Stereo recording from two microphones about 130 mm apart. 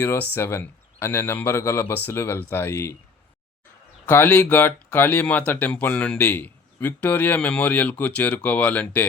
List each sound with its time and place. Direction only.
0.0 s speech: 15° left (ahead or behind)
4.0 s speech: 15° left (ahead or behind)